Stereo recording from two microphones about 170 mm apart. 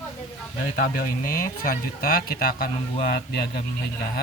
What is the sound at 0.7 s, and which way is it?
Speech, 55° left (ahead or behind).